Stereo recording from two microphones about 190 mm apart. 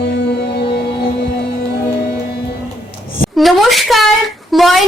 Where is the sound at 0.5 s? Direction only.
60° left (ahead or behind).